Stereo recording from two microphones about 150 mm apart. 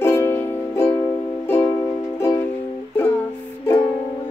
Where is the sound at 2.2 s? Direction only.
15° left (ahead or behind).